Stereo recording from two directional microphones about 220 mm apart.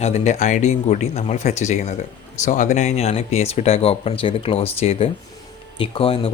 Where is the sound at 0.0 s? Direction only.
30° left (ahead or behind).